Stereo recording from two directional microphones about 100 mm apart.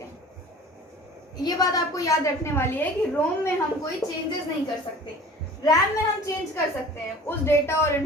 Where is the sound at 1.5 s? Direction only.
40° left (ahead or behind).